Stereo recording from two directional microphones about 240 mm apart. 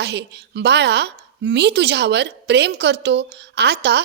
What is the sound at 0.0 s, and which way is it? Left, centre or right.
A woman's voice, right.